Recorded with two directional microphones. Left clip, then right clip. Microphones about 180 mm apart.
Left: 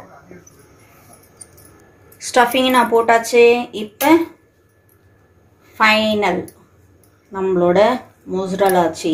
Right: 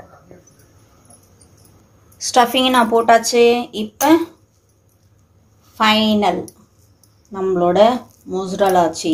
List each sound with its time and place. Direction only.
2.3 s speech: 35° right (ahead or behind)
5.8 s speech: 35° right (ahead or behind)
7.3 s speech: 35° right (ahead or behind)